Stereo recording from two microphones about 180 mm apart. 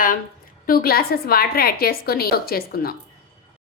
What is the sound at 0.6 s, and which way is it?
A woman's voice, 55° left (ahead or behind).